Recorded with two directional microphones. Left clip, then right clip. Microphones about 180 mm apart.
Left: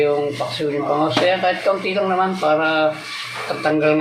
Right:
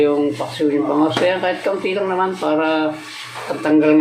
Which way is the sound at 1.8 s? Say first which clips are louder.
Even; 20° right (ahead or behind).